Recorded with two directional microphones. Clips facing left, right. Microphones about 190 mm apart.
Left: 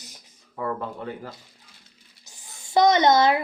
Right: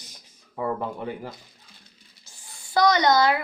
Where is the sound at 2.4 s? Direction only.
20° left (ahead or behind).